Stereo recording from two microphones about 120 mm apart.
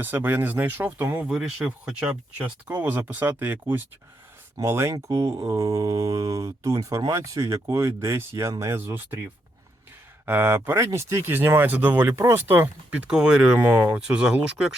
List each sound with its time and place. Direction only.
0.0 s speech: 15° right (ahead or behind)
10.2 s speech: 20° right (ahead or behind)
13.1 s speech: 5° right (ahead or behind)